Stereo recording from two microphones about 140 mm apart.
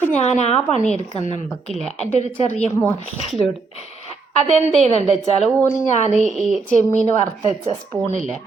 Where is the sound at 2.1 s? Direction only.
55° left (ahead or behind).